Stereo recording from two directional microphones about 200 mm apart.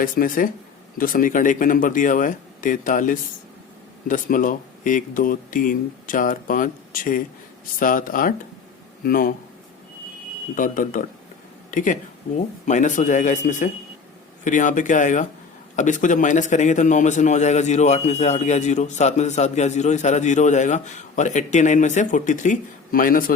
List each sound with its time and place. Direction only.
0.0 s a man's voice: 45° left (ahead or behind)
10.5 s a man's voice: 40° left (ahead or behind)